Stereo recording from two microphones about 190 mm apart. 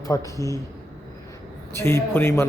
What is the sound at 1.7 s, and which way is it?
Speech, 10° left (ahead or behind).